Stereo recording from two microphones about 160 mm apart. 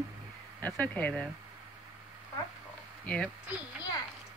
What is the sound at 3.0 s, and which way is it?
Speech, 5° left (ahead or behind).